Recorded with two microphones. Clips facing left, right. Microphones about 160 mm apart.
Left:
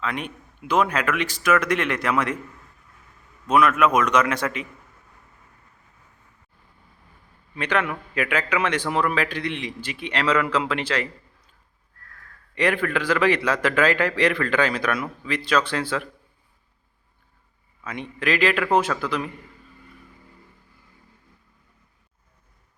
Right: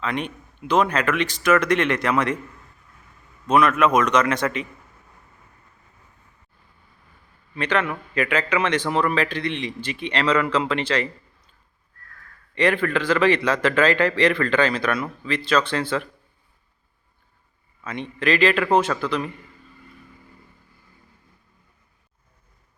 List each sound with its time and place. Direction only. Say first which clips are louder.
0.0 s a man's voice: right 2 dB; 5° left (ahead or behind)
3.4 s a man's voice: right 1 dB; 5° left (ahead or behind)
7.5 s a man's voice: right 1 dB; 10° left (ahead or behind)
12.5 s a man's voice: right 2 dB; 10° left (ahead or behind)
17.8 s a man's voice: right 2 dB; 10° left (ahead or behind)